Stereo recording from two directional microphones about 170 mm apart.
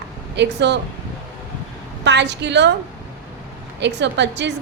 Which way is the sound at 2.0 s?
90° right.